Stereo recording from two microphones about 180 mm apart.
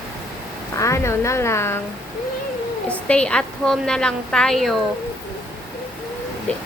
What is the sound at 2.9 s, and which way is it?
A woman's voice, 5° left (ahead or behind).